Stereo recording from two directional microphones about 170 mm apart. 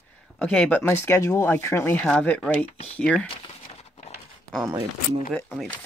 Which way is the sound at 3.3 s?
30° left (ahead or behind).